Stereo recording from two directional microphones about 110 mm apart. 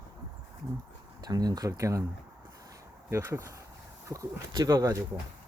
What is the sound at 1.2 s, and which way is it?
Speech, 35° right (ahead or behind).